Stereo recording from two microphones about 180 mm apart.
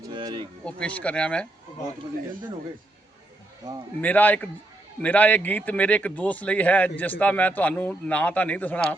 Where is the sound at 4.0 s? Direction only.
10° left (ahead or behind).